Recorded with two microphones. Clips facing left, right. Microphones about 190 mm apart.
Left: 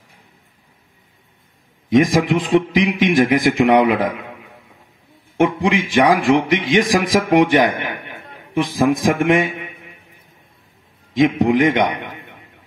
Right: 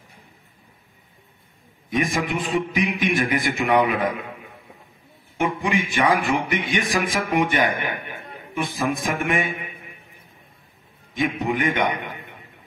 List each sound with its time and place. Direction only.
1.9 s a man's voice: 90° left
5.4 s a man's voice: 90° left
11.1 s a man's voice: 90° left